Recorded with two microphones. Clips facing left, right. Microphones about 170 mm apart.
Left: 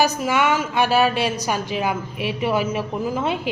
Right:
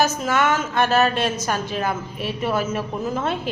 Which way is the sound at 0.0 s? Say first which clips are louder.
Left 1 dB; 15° left (ahead or behind).